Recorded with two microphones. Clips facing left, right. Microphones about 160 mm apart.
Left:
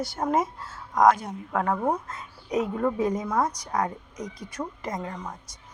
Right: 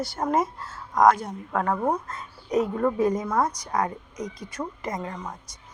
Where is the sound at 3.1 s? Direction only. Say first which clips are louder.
Right 1 dB; 5° left (ahead or behind).